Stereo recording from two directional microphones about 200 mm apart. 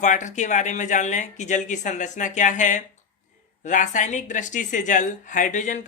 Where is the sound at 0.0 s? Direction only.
40° left (ahead or behind).